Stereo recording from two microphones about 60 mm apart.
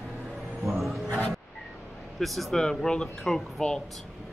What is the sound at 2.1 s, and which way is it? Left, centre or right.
Speech, centre.